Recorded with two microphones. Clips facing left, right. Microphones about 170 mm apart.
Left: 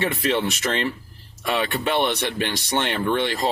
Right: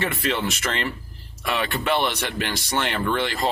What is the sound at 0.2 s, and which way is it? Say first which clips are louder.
Speech: left 3 dB; 20° left (ahead or behind).